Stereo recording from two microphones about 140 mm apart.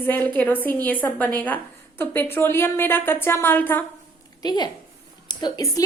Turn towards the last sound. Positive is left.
turn(degrees=25)  # may be behind; listen again after turning